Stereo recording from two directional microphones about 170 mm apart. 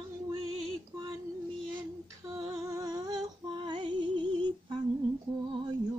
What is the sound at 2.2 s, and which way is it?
Music, 30° right (ahead or behind).